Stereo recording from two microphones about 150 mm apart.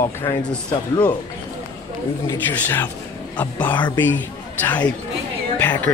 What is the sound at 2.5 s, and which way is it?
Speech, 15° left (ahead or behind).